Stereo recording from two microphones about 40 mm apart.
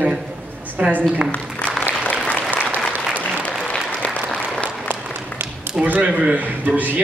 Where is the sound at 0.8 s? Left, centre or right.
Right.